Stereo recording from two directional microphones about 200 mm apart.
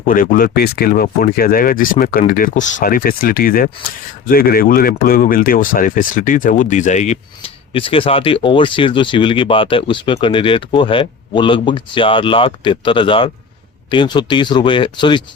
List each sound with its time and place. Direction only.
0.1 s speech: 45° left (ahead or behind); by 15.2 s 25° left (ahead or behind)